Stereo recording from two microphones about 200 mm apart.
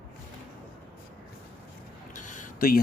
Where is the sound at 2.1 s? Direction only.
40° left (ahead or behind).